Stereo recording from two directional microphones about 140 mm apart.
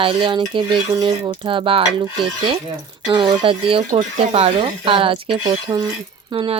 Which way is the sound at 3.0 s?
30° right (ahead or behind).